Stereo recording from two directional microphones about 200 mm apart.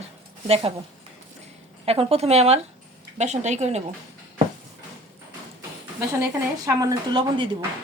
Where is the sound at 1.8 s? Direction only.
30° right (ahead or behind).